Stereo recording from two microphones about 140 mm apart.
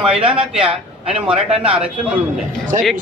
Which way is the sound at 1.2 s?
45° right (ahead or behind).